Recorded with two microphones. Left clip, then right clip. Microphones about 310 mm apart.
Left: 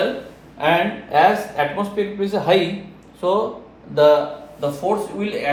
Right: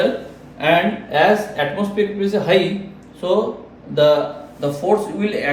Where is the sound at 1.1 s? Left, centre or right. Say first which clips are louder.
Even; centre.